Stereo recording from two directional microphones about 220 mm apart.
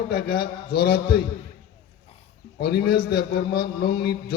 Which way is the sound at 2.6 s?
45° left (ahead or behind).